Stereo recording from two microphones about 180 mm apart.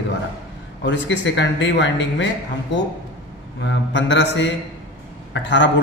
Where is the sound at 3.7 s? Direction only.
85° left.